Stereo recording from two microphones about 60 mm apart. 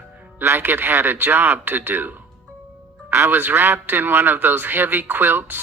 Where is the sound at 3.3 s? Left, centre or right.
Right.